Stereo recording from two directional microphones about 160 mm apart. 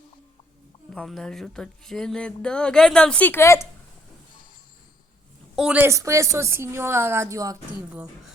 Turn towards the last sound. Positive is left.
turn(degrees=-20)  # may be behind; listen again after turning